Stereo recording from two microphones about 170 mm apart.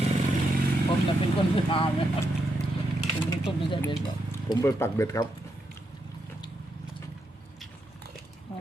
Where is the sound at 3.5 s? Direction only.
30° left (ahead or behind).